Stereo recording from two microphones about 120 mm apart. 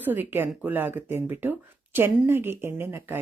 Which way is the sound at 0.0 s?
15° right (ahead or behind).